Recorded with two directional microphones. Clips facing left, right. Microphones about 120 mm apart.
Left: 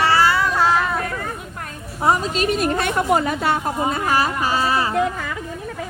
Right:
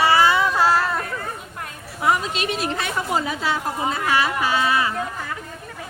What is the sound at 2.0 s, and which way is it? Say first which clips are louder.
A woman's voice: left 3 dB; 35° left (ahead or behind).